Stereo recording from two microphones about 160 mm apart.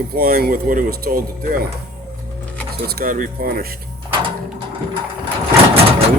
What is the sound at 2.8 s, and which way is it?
Speech, 65° right (ahead or behind).